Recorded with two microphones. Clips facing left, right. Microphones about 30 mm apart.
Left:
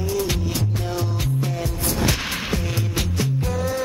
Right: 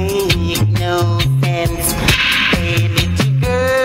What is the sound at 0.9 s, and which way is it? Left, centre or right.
Music, right.